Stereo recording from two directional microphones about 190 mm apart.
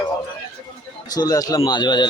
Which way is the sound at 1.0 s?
20° left (ahead or behind).